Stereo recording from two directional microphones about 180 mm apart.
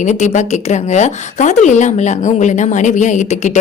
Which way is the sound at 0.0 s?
40° left (ahead or behind).